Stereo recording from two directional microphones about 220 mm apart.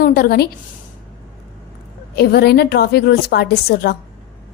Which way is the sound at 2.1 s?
45° left (ahead or behind).